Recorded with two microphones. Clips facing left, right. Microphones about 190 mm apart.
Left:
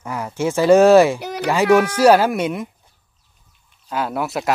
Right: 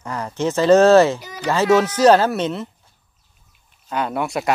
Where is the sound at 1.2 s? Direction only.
65° left (ahead or behind).